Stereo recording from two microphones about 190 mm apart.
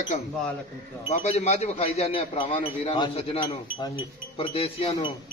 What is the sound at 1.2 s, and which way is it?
A man's voice, 35° left (ahead or behind).